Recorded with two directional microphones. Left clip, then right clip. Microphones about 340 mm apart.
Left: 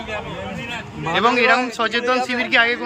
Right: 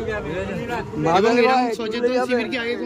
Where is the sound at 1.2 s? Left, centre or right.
Centre.